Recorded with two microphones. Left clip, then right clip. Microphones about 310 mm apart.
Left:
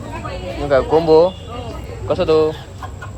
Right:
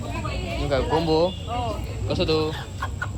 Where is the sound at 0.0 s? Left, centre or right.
Centre.